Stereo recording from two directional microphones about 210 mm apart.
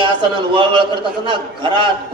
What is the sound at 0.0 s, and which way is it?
A man's voice, 25° right (ahead or behind).